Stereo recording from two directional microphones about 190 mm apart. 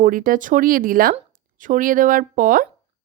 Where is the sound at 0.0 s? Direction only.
45° right (ahead or behind).